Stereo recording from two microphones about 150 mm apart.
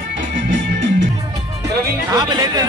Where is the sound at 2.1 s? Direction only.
25° right (ahead or behind).